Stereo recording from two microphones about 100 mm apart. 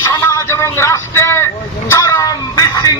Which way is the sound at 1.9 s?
30° left (ahead or behind).